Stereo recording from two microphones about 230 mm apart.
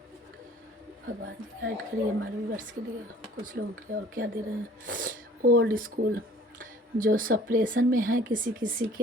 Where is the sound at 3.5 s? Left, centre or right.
Right.